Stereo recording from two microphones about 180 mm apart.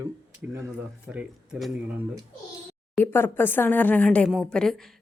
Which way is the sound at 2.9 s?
10° left (ahead or behind).